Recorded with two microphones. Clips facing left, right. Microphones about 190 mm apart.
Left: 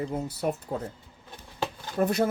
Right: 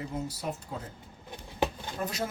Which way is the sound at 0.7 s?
40° left (ahead or behind).